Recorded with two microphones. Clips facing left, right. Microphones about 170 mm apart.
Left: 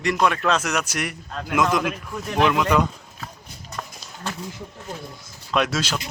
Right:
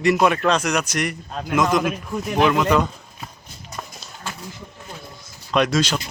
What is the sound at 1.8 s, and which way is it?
Speech, 10° right (ahead or behind).